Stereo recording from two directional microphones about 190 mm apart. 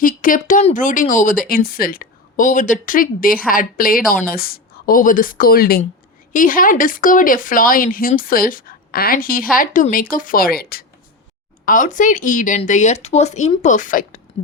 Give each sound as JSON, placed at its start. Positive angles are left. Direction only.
{"t": 0.0, "sound": "speech", "side_deg": 45}